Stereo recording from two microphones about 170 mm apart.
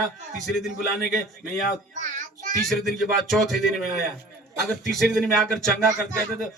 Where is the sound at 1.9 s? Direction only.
45° right (ahead or behind).